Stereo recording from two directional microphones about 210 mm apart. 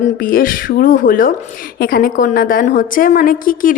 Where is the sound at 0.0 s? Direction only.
40° left (ahead or behind).